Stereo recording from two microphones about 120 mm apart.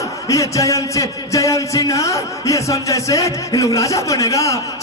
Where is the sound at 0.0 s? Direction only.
25° left (ahead or behind).